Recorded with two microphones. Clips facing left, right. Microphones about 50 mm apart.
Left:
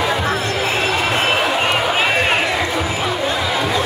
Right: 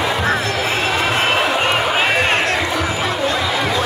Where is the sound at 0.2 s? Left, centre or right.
Right.